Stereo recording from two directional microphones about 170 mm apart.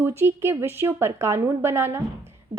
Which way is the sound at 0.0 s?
15° right (ahead or behind).